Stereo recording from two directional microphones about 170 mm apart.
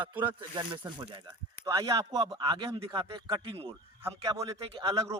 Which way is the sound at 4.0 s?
20° right (ahead or behind).